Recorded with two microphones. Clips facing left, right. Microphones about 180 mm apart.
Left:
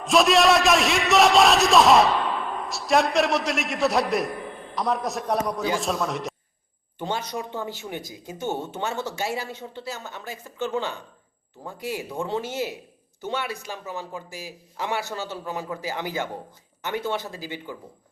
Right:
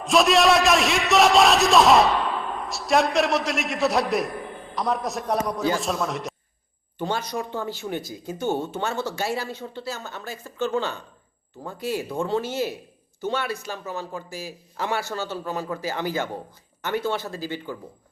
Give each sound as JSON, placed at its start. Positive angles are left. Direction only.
{"t": 0.0, "sound": "a man's voice", "side_deg": 0}
{"t": 7.0, "sound": "speech", "side_deg": 20}